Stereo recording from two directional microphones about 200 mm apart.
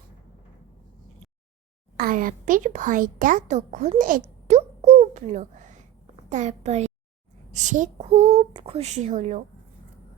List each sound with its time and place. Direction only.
2.0 s a woman's voice: 45° right (ahead or behind)